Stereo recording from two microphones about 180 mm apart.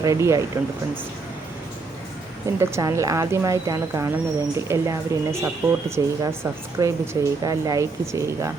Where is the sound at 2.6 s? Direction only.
15° right (ahead or behind).